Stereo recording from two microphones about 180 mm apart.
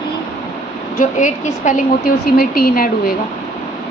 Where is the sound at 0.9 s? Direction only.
45° left (ahead or behind).